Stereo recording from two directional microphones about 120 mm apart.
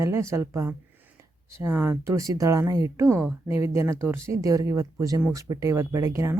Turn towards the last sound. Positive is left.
turn(degrees=-25)  # may be behind; listen again after turning